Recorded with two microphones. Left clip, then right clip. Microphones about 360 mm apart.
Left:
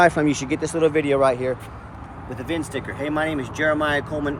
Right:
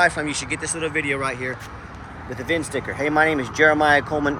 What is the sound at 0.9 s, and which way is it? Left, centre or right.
Speech, centre.